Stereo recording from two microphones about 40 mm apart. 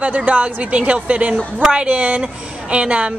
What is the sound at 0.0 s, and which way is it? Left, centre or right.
A woman's voice, right.